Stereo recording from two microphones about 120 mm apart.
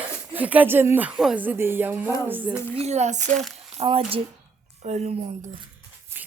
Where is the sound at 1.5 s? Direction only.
20° right (ahead or behind).